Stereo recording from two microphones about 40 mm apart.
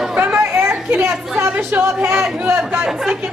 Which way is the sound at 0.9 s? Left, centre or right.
Right.